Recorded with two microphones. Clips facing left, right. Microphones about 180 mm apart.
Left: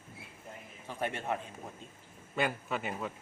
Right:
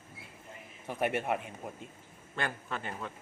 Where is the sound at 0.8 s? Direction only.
15° right (ahead or behind).